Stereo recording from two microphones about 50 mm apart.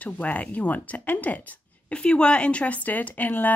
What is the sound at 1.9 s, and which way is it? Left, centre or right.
Speech, centre.